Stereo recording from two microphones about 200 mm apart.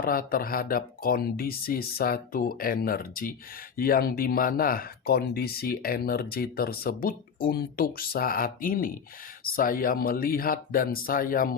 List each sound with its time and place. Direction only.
0.0 s speech: 45° left (ahead or behind)